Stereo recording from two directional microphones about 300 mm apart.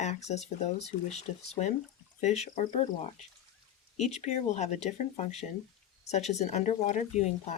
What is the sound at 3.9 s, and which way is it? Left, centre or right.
Speech, left.